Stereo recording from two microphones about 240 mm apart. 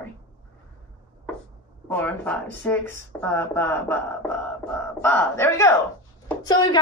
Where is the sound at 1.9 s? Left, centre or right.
Centre.